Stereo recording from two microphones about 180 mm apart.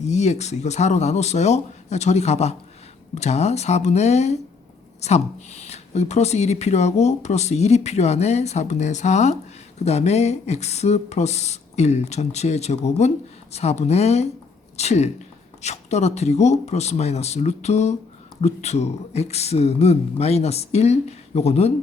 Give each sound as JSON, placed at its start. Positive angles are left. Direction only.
{"t": 0.0, "sound": "speech", "side_deg": 40}